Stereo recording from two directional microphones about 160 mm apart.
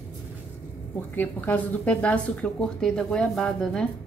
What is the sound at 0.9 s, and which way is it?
A woman's voice, 10° left (ahead or behind).